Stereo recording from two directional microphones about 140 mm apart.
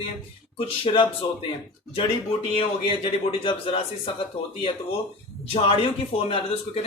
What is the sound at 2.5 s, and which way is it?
Speech, 40° left (ahead or behind).